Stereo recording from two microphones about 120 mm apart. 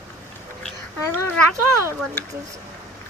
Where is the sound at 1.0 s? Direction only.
25° left (ahead or behind).